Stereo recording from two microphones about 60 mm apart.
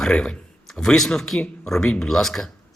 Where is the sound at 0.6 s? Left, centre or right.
Centre.